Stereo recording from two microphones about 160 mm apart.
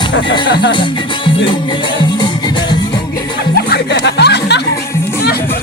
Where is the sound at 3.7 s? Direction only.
90° left.